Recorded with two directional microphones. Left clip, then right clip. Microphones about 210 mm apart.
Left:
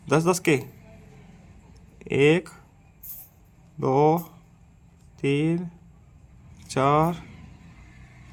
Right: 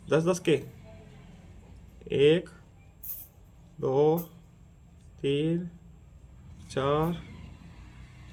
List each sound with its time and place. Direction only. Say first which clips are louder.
0.1 s speech: left 4 dB; 45° left (ahead or behind)
2.0 s speech: left 3 dB; 45° left (ahead or behind)
3.8 s speech: left 4 dB; 45° left (ahead or behind)
5.2 s speech: left 4 dB; 45° left (ahead or behind)
6.7 s speech: left 7 dB; 45° left (ahead or behind)